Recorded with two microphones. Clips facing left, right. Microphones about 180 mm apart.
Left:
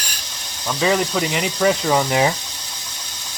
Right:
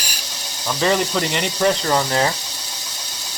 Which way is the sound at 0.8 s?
Centre (ahead or behind).